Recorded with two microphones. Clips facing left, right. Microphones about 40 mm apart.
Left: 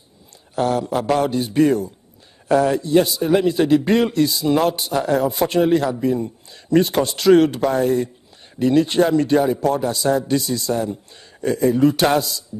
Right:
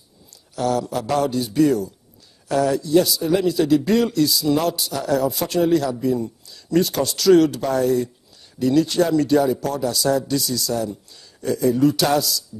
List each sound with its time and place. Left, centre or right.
0.6 s a man's voice: left